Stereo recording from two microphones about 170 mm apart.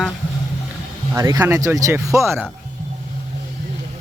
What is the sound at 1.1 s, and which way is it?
Speech, 20° right (ahead or behind).